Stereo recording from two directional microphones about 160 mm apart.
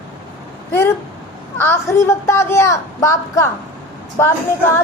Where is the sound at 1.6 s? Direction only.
15° left (ahead or behind).